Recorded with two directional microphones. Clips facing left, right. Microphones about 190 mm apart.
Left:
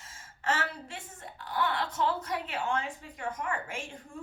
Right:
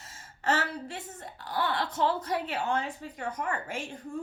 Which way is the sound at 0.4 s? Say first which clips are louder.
Right 3 dB; 35° right (ahead or behind).